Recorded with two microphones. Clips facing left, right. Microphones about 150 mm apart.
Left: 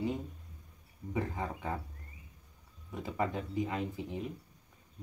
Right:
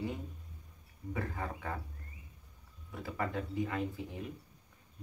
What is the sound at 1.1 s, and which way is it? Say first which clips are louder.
Speech: left 3 dB; 20° left (ahead or behind).